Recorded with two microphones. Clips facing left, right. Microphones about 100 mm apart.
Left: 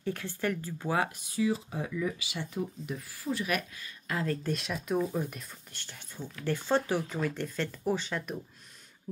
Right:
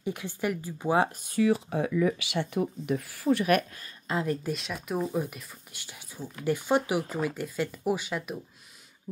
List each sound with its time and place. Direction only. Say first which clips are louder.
0.0 s speech: right 2 dB; 15° right (ahead or behind)
1.2 s speech: right 5 dB; 60° right (ahead or behind)
4.1 s speech: right 3 dB; 20° right (ahead or behind)
4.5 s speech: even; centre (ahead or behind)
4.9 s speech: right 1 dB; 15° right (ahead or behind)